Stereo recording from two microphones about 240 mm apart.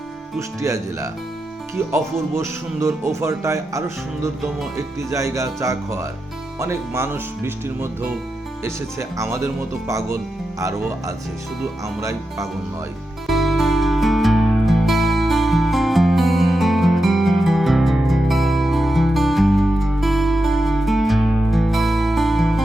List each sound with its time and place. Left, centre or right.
0.3 s speech: centre
11.9 s speech: centre
13.2 s music: centre